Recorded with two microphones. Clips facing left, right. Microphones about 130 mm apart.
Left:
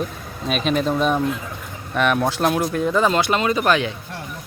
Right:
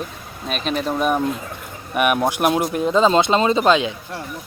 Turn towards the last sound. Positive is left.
turn(degrees=-20)  # may be behind; listen again after turning